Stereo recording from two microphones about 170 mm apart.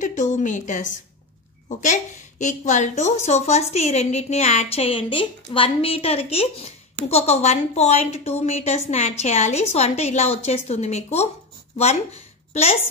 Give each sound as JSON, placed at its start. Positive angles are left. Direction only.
{"t": 0.0, "sound": "a woman's voice", "side_deg": 45}